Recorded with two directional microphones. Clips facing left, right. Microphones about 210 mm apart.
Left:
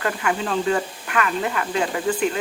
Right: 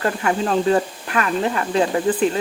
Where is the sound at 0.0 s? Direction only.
40° right (ahead or behind).